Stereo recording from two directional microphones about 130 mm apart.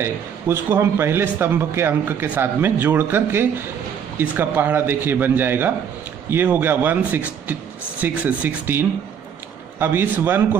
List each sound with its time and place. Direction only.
0.0 s a man's voice: 20° right (ahead or behind)